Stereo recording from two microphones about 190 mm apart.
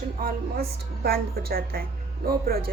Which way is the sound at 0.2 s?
50° right (ahead or behind).